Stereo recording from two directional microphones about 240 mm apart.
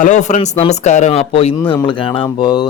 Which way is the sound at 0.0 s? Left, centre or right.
Left.